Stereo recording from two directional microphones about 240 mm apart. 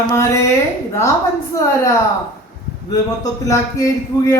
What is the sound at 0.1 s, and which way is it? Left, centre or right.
Speech, centre.